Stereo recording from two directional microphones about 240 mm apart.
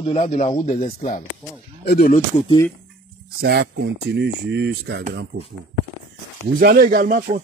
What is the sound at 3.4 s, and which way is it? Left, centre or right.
Speech, right.